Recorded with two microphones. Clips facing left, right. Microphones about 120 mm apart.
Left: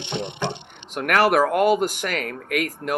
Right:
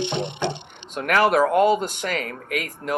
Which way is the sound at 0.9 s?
60° left (ahead or behind).